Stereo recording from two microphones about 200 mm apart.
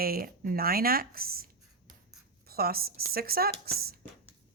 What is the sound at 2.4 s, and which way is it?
A woman's voice, 50° right (ahead or behind).